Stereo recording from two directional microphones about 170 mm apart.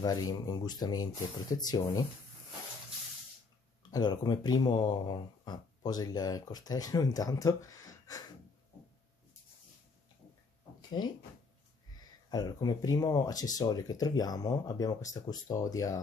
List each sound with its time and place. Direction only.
0.0 s speech: 20° left (ahead or behind)
3.9 s speech: 25° left (ahead or behind)
12.0 s speech: 25° left (ahead or behind)